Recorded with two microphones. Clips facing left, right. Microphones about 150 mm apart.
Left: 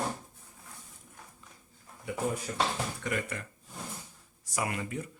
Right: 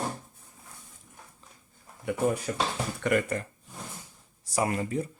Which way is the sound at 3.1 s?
65° right (ahead or behind).